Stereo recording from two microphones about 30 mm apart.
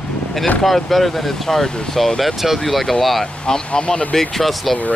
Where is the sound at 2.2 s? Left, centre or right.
Centre.